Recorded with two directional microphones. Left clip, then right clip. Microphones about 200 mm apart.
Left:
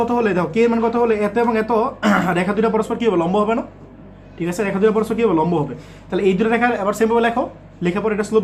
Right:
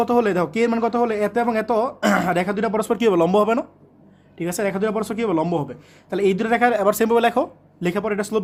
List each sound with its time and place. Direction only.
0.0 s a man's voice: 55° right (ahead or behind)